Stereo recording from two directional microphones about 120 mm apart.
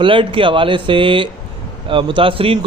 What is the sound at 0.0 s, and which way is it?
A man's voice, 45° right (ahead or behind).